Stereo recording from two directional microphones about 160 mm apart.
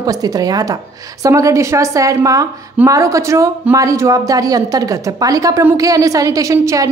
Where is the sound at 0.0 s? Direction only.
25° right (ahead or behind).